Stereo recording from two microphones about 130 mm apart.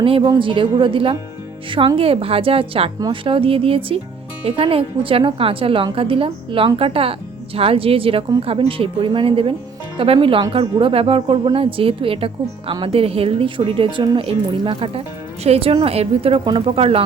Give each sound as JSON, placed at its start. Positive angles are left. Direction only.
{"t": 0.0, "sound": "a woman's voice", "side_deg": -45}